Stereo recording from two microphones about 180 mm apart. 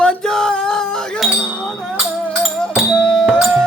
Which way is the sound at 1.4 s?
5° left (ahead or behind).